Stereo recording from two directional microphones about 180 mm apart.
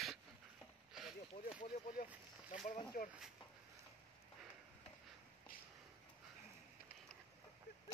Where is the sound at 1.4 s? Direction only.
50° left (ahead or behind).